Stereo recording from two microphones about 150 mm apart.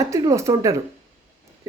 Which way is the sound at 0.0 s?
20° right (ahead or behind).